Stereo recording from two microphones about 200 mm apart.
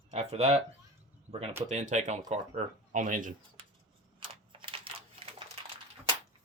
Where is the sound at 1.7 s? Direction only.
35° right (ahead or behind).